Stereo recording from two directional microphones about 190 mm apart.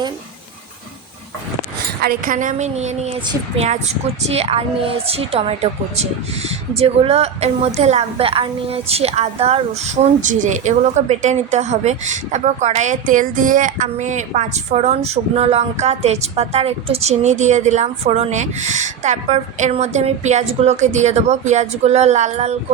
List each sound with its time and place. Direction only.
2.0 s a woman's voice: 50° right (ahead or behind)